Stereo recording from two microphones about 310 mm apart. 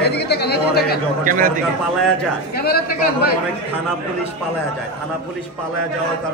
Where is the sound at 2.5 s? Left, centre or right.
Left.